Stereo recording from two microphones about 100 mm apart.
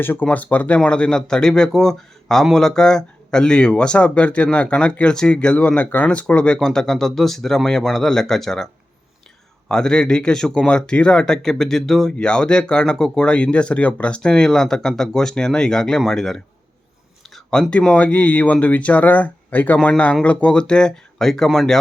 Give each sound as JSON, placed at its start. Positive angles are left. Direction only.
{"t": 0.0, "sound": "a man's voice", "side_deg": 20}